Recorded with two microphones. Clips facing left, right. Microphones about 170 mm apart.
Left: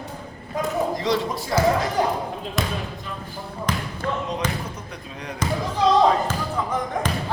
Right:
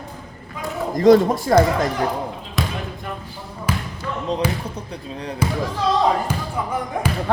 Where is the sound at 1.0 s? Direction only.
50° right (ahead or behind).